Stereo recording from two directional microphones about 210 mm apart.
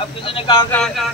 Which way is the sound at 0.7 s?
Centre (ahead or behind).